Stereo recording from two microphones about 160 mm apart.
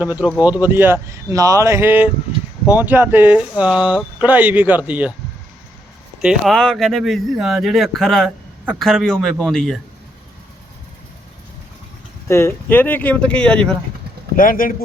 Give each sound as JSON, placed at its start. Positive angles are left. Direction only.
{"t": 0.0, "sound": "speech", "side_deg": -10}
{"t": 6.2, "sound": "speech", "side_deg": 0}
{"t": 12.3, "sound": "speech", "side_deg": 15}
{"t": 14.3, "sound": "speech", "side_deg": 60}